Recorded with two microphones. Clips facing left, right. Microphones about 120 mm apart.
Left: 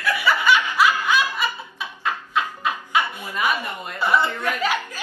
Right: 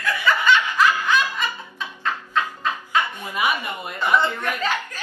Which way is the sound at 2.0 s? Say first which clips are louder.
Even; 10° left (ahead or behind).